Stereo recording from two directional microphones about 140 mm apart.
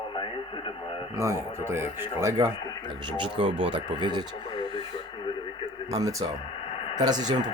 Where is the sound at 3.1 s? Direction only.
35° right (ahead or behind).